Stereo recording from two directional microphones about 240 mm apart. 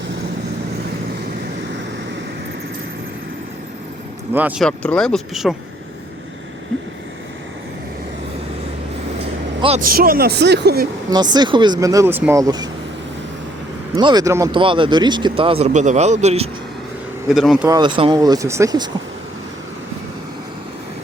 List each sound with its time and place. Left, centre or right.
4.4 s speech: centre
9.6 s speech: right
9.8 s speech: right
11.1 s speech: centre
13.9 s speech: centre
17.3 s speech: centre
17.7 s speech: centre